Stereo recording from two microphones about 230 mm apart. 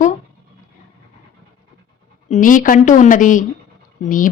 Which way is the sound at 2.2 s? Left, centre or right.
Left.